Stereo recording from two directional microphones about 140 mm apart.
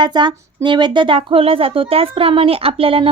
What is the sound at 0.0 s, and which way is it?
Speech, 35° right (ahead or behind).